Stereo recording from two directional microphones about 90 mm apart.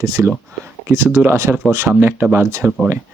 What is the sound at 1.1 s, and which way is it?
Speech, 25° right (ahead or behind).